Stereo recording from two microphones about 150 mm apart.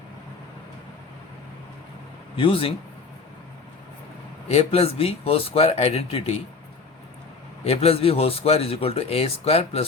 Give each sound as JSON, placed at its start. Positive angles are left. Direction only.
{"t": 2.3, "sound": "speech", "side_deg": 35}
{"t": 4.4, "sound": "speech", "side_deg": 40}
{"t": 7.6, "sound": "speech", "side_deg": 40}